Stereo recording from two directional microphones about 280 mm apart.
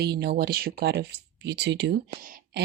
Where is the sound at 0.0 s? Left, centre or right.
Right.